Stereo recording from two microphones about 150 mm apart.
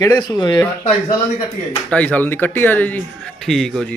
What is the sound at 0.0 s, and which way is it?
Speech, 25° left (ahead or behind).